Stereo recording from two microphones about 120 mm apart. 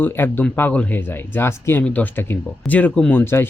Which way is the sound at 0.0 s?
15° left (ahead or behind).